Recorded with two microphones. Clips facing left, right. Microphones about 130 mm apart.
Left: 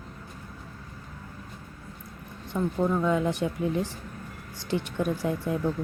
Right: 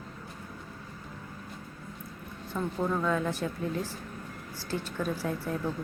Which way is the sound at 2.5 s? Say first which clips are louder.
Left 4 dB; 10° left (ahead or behind).